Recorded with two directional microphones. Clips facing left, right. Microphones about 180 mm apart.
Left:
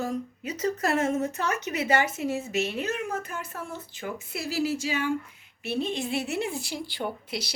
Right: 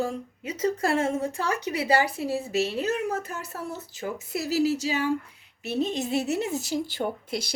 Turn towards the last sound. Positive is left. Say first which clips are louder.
# right 3 dB
turn(degrees=-50)  # may be behind; listen again after turning